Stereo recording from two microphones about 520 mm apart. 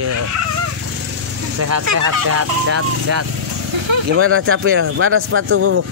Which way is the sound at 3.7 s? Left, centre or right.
Right.